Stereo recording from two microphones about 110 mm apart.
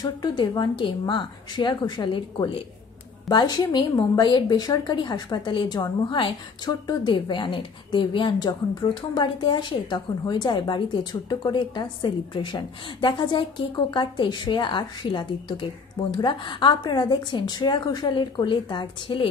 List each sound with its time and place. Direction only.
0.0 s a woman's voice: 40° left (ahead or behind)